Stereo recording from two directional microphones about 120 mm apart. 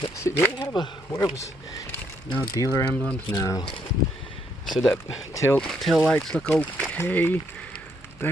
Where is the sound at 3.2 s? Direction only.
25° left (ahead or behind).